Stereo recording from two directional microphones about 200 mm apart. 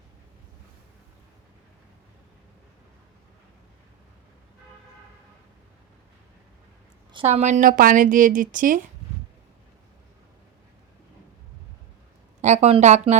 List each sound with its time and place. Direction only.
7.1 s a woman's voice: 30° right (ahead or behind)
12.4 s a woman's voice: 35° right (ahead or behind)